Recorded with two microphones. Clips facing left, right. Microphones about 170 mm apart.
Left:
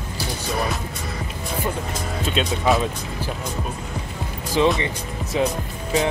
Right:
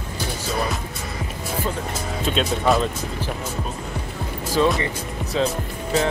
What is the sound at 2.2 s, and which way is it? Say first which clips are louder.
Speech: right 1 dB; centre (ahead or behind).